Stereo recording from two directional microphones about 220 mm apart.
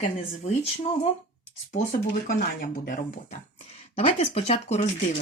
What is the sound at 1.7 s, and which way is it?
Speech, 35° left (ahead or behind).